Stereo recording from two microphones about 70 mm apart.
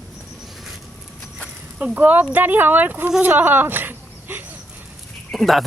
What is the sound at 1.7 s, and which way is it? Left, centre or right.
A child's voice, right.